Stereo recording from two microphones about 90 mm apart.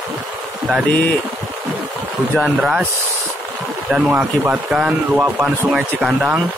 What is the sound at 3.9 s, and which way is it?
Speech, 15° right (ahead or behind).